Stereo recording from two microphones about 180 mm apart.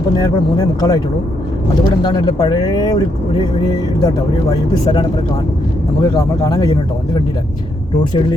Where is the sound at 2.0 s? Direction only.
20° left (ahead or behind).